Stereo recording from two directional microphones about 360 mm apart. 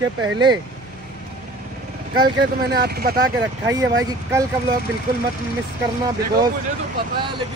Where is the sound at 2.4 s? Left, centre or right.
Right.